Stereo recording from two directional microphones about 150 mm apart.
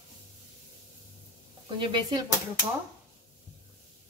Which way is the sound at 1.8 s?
35° right (ahead or behind).